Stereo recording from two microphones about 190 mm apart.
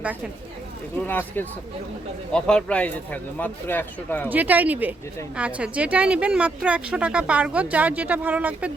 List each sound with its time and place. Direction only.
1.0 s speech: 10° left (ahead or behind)
4.3 s speech: 10° right (ahead or behind)